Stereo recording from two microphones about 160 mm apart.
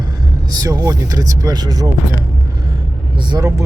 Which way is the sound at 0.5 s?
25° right (ahead or behind).